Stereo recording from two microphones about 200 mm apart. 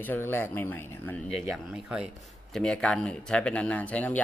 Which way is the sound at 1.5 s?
5° right (ahead or behind).